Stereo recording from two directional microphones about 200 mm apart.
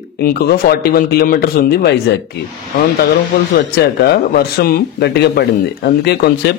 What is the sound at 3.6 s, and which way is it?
Speech, 50° left (ahead or behind).